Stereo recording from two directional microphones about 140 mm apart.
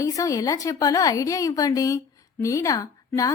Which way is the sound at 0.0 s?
25° left (ahead or behind).